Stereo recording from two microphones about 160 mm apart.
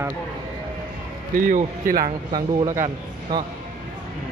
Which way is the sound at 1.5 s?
60° right (ahead or behind).